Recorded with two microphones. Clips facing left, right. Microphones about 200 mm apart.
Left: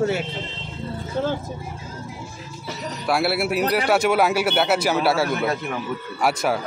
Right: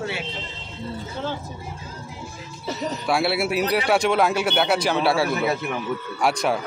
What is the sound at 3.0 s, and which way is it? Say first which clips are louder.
Speech: left 1 dB; centre (ahead or behind).